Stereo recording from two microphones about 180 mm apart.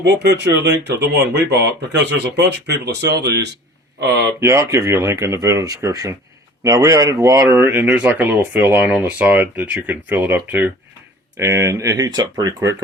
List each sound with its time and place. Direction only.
0.0 s speech: 70° right (ahead or behind)
4.4 s speech: 15° right (ahead or behind)